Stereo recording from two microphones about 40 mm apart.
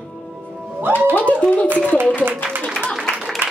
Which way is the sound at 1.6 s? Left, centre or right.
Right.